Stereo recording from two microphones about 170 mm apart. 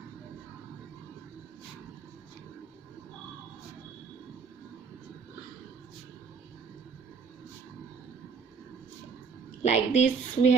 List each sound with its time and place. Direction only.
9.6 s a woman's voice: 40° left (ahead or behind)